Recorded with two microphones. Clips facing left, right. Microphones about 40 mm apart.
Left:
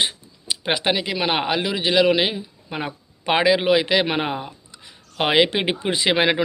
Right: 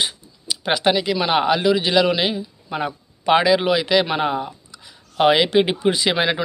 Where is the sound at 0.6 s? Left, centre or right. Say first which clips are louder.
Right 3 dB; centre.